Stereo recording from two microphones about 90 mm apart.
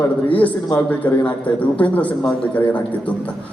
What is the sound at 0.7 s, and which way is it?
A man's voice, 15° left (ahead or behind).